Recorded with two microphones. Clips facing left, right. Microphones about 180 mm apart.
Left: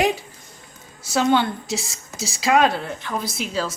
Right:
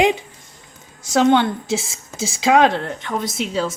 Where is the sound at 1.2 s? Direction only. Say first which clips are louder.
Right 4 dB; 20° right (ahead or behind).